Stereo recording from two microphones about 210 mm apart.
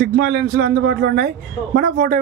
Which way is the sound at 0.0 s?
50° right (ahead or behind).